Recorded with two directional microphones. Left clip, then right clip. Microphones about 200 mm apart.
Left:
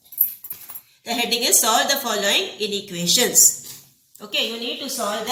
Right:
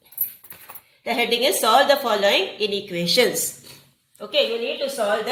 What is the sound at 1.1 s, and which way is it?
A woman's voice, 20° right (ahead or behind).